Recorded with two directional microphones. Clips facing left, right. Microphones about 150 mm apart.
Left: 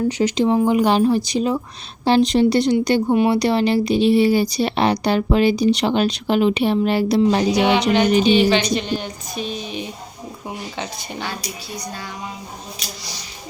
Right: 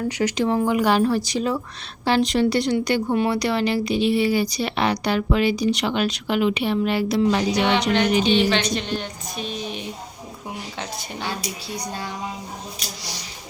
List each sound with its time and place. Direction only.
0.1 s a woman's voice: 25° left (ahead or behind)
7.5 s speech: 5° left (ahead or behind)